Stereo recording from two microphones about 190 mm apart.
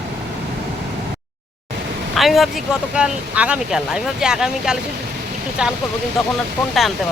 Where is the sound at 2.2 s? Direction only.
Centre (ahead or behind).